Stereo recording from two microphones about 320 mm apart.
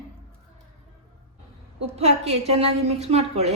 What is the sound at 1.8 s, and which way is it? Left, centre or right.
A woman's voice, centre.